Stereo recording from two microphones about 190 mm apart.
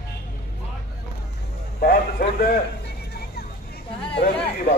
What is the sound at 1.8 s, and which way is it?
Speech, 50° left (ahead or behind).